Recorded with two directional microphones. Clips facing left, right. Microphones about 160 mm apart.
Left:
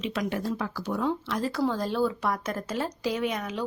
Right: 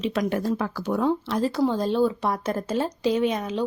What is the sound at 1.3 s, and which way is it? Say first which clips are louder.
Speech: right 4 dB; 30° right (ahead or behind).